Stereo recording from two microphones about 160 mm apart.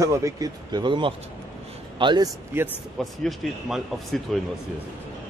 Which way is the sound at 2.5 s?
15° right (ahead or behind).